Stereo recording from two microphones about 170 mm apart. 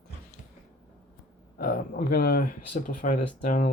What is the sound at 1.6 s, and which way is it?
Speech, 55° left (ahead or behind).